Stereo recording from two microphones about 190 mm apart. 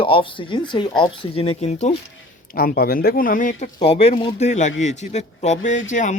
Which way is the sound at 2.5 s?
50° left (ahead or behind).